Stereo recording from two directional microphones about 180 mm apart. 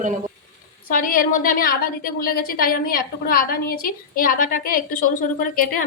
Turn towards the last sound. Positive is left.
turn(degrees=50)  # may be behind; listen again after turning